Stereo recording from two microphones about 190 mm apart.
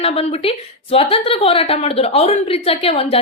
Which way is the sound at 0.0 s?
30° left (ahead or behind).